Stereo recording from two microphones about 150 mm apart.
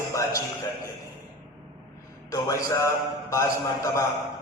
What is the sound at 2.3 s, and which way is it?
A man's voice, 20° left (ahead or behind).